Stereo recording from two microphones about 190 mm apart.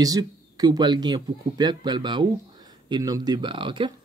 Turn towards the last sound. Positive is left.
turn(degrees=-25)  # may be behind; listen again after turning